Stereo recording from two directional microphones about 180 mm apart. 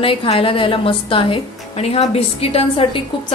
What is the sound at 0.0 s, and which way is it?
A woman's voice, 30° left (ahead or behind).